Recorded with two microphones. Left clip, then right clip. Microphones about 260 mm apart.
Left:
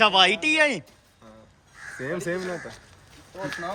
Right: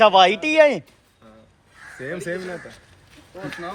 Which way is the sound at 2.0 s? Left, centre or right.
Left.